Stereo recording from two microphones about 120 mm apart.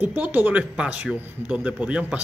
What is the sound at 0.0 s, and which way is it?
A man's voice, 15° right (ahead or behind).